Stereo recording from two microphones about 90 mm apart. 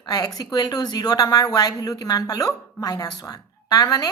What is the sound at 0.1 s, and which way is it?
A woman's voice, 45° left (ahead or behind).